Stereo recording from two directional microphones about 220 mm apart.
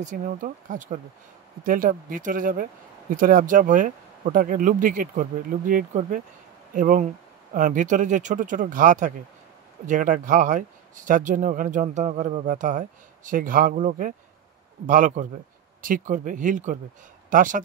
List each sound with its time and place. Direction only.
0.0 s speech: 35° right (ahead or behind)